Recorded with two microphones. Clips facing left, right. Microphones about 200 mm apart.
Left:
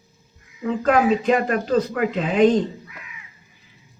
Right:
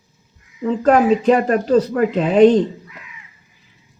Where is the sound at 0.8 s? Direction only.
40° right (ahead or behind).